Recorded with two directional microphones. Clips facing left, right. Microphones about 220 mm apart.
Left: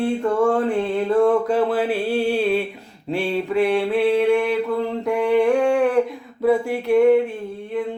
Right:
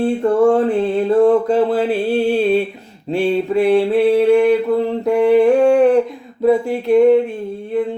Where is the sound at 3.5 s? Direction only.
35° right (ahead or behind).